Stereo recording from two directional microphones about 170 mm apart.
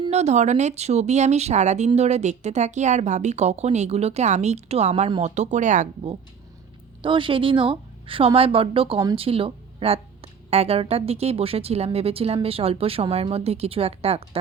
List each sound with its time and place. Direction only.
0.0 s a woman's voice: 40° right (ahead or behind)
7.0 s a woman's voice: 30° right (ahead or behind)